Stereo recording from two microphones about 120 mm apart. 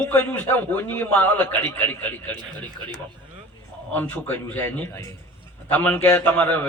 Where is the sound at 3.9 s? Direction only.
15° left (ahead or behind).